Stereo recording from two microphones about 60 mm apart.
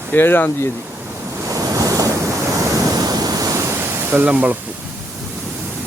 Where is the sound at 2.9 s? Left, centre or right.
Right.